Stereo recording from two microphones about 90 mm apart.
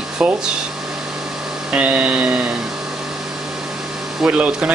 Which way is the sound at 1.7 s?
15° right (ahead or behind).